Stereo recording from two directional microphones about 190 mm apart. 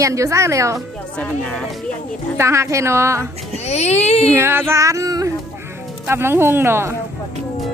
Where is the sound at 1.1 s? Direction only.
5° left (ahead or behind).